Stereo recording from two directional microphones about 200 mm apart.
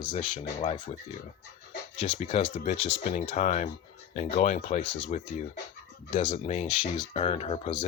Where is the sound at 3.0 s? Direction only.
40° left (ahead or behind).